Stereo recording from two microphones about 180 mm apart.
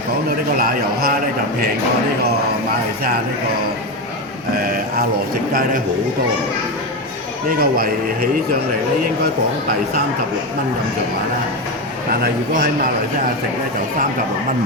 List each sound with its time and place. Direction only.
0.3 s a man's voice: 55° right (ahead or behind)
4.5 s a man's voice: 55° right (ahead or behind)
7.6 s a man's voice: 55° right (ahead or behind)
12.2 s a man's voice: 55° right (ahead or behind)